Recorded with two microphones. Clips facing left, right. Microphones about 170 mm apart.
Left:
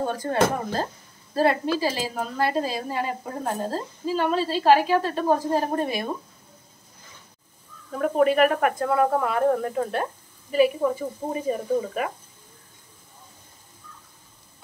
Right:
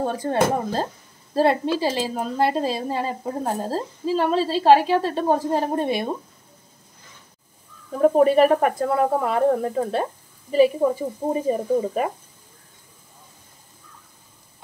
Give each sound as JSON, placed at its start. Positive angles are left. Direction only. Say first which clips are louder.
{"t": 0.0, "sound": "a woman's voice", "louder": "right 1 dB", "side_deg": -30}
{"t": 8.0, "sound": "a woman's voice", "louder": "right 4 dB", "side_deg": -30}